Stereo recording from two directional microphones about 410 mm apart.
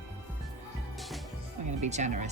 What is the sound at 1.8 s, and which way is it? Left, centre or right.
Music, centre.